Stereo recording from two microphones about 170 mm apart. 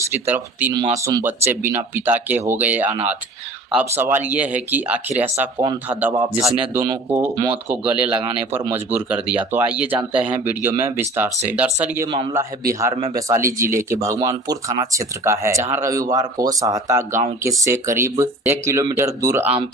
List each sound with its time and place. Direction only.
0.1 s speech: 10° right (ahead or behind)